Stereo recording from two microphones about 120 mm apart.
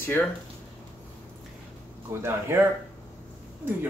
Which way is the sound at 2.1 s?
20° right (ahead or behind).